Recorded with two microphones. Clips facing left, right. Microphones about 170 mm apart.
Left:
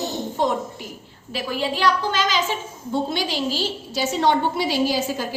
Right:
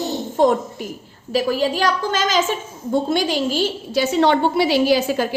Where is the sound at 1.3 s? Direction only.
40° right (ahead or behind); by 5.2 s 70° right (ahead or behind).